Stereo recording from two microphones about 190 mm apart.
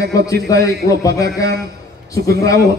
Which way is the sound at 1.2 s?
55° right (ahead or behind).